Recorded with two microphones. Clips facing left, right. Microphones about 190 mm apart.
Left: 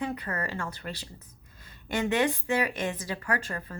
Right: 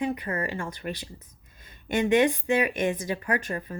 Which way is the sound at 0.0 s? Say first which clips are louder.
Right 4 dB; 15° right (ahead or behind).